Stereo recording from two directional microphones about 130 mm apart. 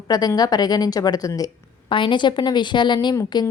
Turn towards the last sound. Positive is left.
turn(degrees=30)  # may be behind; listen again after turning